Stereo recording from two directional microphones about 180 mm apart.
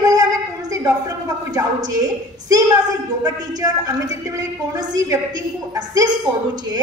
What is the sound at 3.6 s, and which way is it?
A woman's voice, 20° right (ahead or behind).